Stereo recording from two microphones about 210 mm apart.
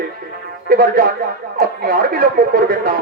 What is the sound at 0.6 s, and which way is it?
Music, 45° right (ahead or behind).